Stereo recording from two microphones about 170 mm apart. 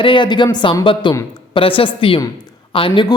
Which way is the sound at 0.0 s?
30° left (ahead or behind).